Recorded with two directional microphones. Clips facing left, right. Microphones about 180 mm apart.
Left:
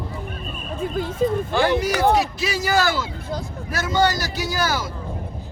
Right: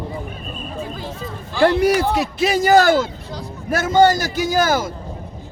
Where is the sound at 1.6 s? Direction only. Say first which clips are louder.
Right 6 dB; 60° right (ahead or behind).